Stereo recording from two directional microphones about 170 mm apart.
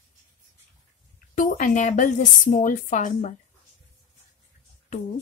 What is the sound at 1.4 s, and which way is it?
A woman's voice, 50° left (ahead or behind).